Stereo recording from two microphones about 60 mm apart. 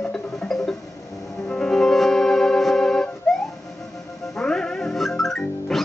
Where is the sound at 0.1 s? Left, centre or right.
Centre.